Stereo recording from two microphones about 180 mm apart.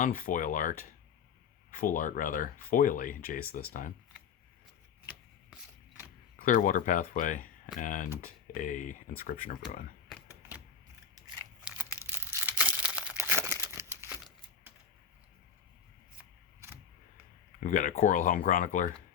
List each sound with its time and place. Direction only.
0.0 s speech: 50° left (ahead or behind)
6.4 s speech: 45° left (ahead or behind)
12.1 s crumpling: 10° right (ahead or behind)
14.1 s a sound: centre (ahead or behind)
16.1 s a sound: 15° right (ahead or behind)
17.6 s speech: 45° left (ahead or behind)